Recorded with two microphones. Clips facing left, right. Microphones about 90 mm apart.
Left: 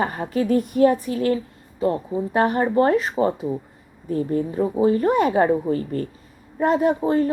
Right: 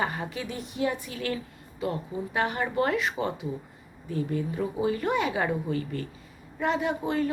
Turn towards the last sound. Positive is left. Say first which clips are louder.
# left 8 dB
turn(degrees=35)  # may be behind; listen again after turning